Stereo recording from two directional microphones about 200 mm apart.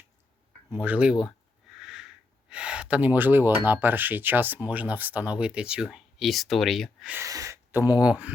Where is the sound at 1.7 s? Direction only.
5° right (ahead or behind).